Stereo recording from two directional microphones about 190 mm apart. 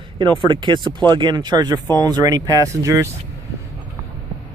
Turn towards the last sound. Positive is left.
turn(degrees=-15)  # may be behind; listen again after turning